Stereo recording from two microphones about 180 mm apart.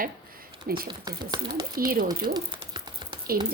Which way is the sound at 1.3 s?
20° right (ahead or behind).